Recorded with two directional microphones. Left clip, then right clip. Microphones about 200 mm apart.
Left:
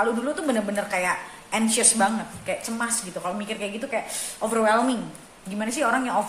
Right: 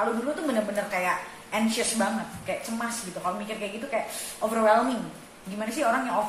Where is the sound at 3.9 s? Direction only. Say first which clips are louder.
Left 1 dB; 55° left (ahead or behind).